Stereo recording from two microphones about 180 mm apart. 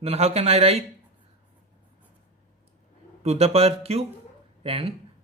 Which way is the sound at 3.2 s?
35° right (ahead or behind).